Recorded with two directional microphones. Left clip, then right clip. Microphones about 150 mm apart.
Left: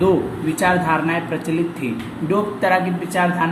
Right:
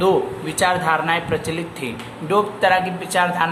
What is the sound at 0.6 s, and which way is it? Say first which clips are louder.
Speech: even; 35° right (ahead or behind).